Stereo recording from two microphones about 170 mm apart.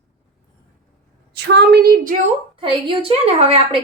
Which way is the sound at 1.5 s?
70° right (ahead or behind).